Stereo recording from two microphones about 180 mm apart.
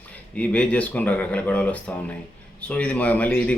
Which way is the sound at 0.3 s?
5° left (ahead or behind).